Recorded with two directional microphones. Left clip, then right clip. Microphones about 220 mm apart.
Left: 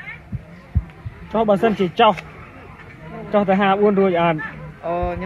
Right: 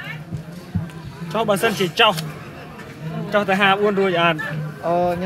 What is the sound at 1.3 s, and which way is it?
Speech, 30° left (ahead or behind).